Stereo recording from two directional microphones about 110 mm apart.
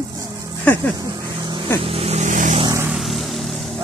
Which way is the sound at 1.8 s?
65° right (ahead or behind).